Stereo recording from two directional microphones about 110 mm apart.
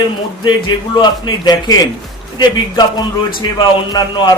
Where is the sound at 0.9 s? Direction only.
40° left (ahead or behind).